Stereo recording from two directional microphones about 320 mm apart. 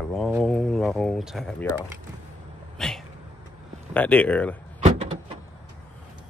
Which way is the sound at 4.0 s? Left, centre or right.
Centre.